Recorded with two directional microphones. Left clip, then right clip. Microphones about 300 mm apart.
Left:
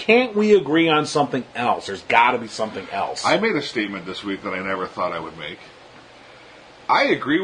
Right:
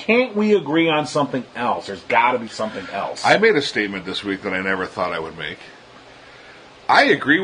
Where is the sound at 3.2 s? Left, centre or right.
Right.